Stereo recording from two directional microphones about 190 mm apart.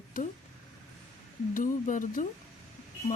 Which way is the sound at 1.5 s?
45° left (ahead or behind).